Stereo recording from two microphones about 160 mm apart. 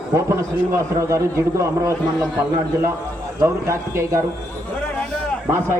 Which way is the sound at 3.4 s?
15° right (ahead or behind).